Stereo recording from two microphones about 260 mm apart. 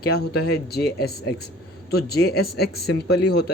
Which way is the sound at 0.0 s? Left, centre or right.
Left.